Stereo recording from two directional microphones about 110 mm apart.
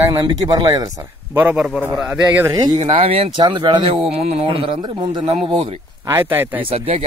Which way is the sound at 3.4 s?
45° right (ahead or behind).